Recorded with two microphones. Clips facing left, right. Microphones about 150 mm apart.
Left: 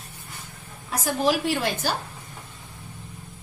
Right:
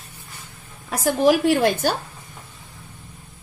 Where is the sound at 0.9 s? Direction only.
55° right (ahead or behind).